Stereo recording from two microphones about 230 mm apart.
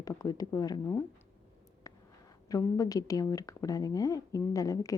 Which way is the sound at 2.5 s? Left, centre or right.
Centre.